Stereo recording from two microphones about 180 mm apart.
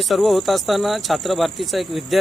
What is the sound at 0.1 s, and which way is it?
Speech, centre (ahead or behind).